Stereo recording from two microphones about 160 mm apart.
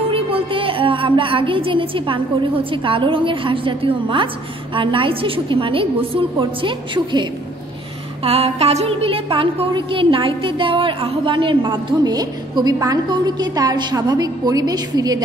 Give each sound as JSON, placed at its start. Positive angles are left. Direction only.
{"t": 0.1, "sound": "music", "side_deg": -35}